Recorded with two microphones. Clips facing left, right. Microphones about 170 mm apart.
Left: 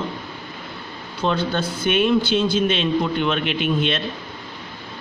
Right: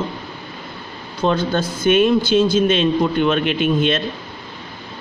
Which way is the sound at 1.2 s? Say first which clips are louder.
Right 3 dB; 45° right (ahead or behind).